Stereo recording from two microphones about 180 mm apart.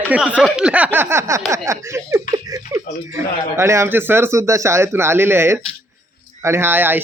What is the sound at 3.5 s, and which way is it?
Speech, 15° right (ahead or behind).